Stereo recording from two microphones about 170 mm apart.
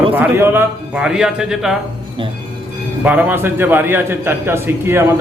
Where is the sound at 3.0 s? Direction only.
10° right (ahead or behind).